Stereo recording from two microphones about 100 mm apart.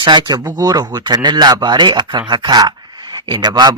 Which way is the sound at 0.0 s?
50° right (ahead or behind).